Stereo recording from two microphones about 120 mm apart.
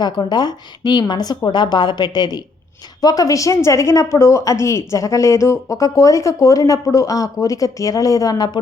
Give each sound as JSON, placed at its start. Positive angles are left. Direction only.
{"t": 0.0, "sound": "a woman's voice", "side_deg": 35}